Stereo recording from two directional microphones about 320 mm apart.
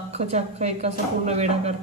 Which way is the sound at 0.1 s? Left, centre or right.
Centre.